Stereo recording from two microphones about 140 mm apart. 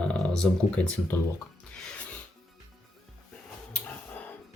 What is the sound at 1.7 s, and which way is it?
Music, 5° left (ahead or behind).